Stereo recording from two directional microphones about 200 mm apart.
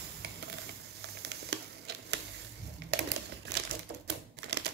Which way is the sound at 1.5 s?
55° right (ahead or behind).